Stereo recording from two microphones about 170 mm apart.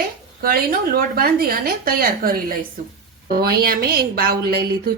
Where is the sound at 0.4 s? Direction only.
60° right (ahead or behind).